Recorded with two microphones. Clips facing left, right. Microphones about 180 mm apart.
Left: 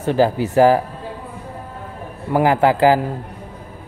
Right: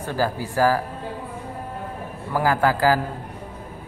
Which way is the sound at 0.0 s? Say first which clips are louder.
Left 8 dB; 20° left (ahead or behind).